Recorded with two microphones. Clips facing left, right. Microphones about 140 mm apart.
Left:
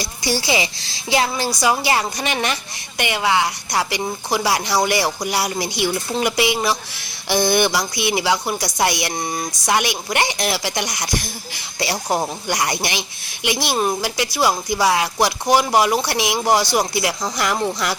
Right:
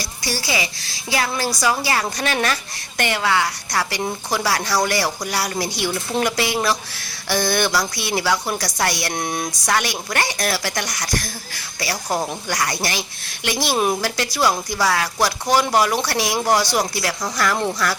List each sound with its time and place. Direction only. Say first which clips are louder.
0.0 s a woman's voice: left 5 dB; 20° left (ahead or behind)
9.1 s a sound: even; centre (ahead or behind)
9.6 s speech: left 3 dB; 15° left (ahead or behind)